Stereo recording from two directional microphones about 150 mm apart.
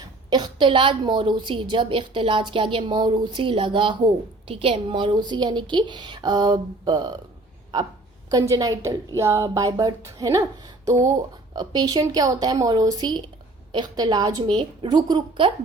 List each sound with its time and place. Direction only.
0.0 s a woman's voice: 30° right (ahead or behind)
8.3 s a woman's voice: 25° right (ahead or behind)